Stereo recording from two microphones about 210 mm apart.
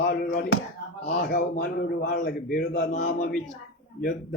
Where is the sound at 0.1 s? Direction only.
45° left (ahead or behind).